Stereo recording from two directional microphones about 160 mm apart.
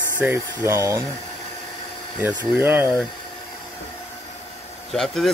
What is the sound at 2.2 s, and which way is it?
Speech, 15° right (ahead or behind).